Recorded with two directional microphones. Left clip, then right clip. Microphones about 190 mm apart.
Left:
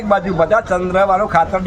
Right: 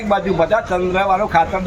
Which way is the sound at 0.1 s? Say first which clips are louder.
Left 2 dB; 5° left (ahead or behind).